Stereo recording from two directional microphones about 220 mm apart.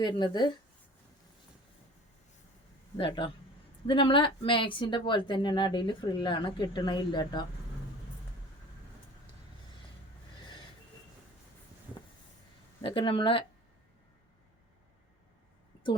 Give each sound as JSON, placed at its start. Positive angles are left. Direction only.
{"t": 0.0, "sound": "speech", "side_deg": 20}
{"t": 3.0, "sound": "speech", "side_deg": 25}
{"t": 12.8, "sound": "speech", "side_deg": 25}